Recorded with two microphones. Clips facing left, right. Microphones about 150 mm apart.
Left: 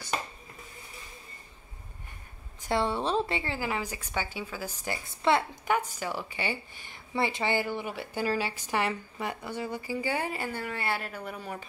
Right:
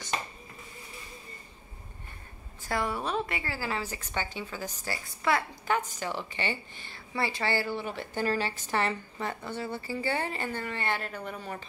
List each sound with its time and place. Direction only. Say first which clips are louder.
2.6 s a woman's voice: left 3 dB; 25° left (ahead or behind)
5.7 s a woman's voice: left 1 dB; 10° left (ahead or behind)